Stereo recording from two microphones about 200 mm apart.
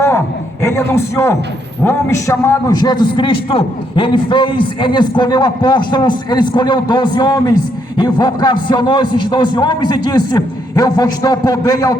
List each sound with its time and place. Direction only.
0.6 s a man's voice: 15° left (ahead or behind)